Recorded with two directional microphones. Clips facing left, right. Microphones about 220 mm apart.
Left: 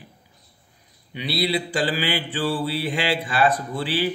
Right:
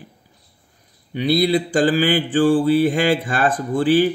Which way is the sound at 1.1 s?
45° right (ahead or behind).